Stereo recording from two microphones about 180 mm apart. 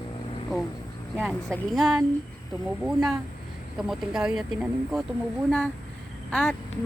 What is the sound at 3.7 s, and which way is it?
Speech, centre (ahead or behind).